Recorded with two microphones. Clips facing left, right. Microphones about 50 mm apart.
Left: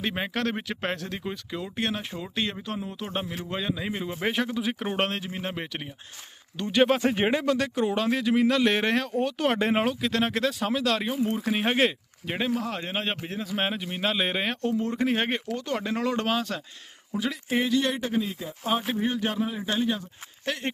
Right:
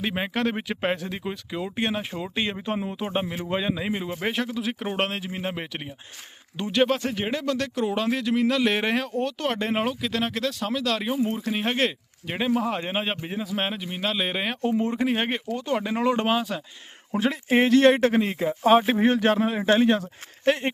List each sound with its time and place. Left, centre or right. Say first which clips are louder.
0.0 s speech: right 2 dB; centre
6.7 s speech: even; centre
7.0 s speech: left 3 dB; left
7.5 s speech: even; centre
12.5 s speech: right 4 dB; centre
16.4 s speech: right 2 dB; centre
17.1 s speech: right 5 dB; right
17.6 s speech: right 9 dB; right
20.4 s speech: right 9 dB; right